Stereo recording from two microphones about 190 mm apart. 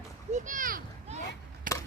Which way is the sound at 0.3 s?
40° right (ahead or behind).